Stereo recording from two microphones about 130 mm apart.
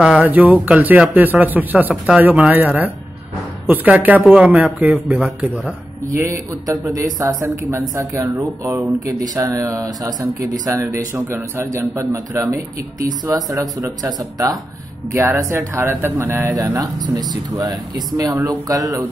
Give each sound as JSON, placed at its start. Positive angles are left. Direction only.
{"t": 0.0, "sound": "speech", "side_deg": -10}
{"t": 6.1, "sound": "a man's voice", "side_deg": -20}
{"t": 15.1, "sound": "a man's voice", "side_deg": -15}